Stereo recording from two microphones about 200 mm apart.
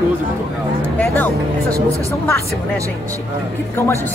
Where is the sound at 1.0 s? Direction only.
10° left (ahead or behind).